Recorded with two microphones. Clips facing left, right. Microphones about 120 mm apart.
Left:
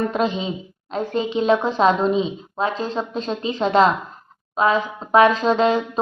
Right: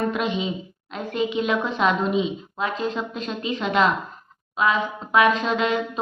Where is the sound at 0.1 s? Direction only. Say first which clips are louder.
Left 3 dB; 35° left (ahead or behind).